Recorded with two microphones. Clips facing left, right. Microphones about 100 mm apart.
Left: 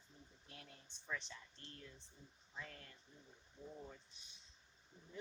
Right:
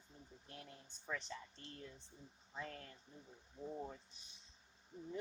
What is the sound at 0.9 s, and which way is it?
Music, 45° right (ahead or behind).